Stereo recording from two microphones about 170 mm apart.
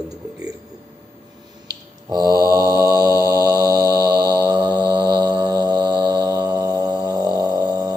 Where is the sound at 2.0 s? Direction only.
20° right (ahead or behind).